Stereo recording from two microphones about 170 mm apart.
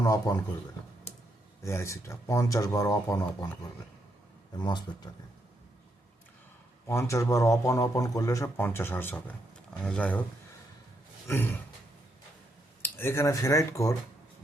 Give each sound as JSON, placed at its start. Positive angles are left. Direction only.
{"t": 0.0, "sound": "speech", "side_deg": 20}
{"t": 1.6, "sound": "speech", "side_deg": 15}
{"t": 4.5, "sound": "speech", "side_deg": 25}
{"t": 6.8, "sound": "speech", "side_deg": 15}
{"t": 12.8, "sound": "speech", "side_deg": 15}